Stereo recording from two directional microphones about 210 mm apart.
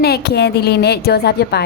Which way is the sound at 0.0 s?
50° left (ahead or behind).